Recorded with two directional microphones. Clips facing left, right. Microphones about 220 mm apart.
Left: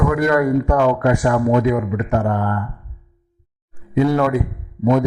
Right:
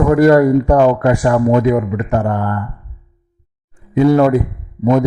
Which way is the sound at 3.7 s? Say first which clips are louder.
Right 5 dB; 35° right (ahead or behind).